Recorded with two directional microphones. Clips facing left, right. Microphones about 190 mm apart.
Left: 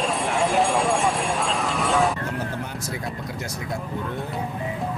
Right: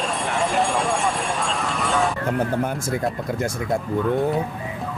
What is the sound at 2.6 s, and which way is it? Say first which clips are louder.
Speech: right 7 dB; 50° right (ahead or behind).